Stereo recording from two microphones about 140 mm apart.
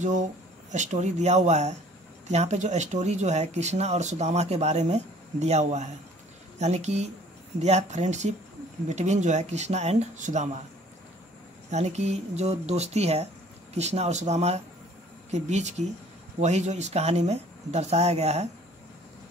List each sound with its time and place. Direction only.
0.0 s speech: 60° right (ahead or behind)
11.7 s speech: 50° right (ahead or behind)